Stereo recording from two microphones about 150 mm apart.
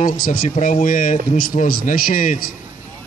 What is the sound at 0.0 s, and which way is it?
A man's voice, 75° left (ahead or behind).